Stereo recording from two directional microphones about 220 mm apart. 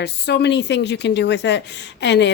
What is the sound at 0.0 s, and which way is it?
A woman's voice, 50° left (ahead or behind).